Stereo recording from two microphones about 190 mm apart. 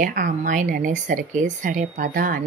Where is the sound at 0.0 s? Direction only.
45° right (ahead or behind).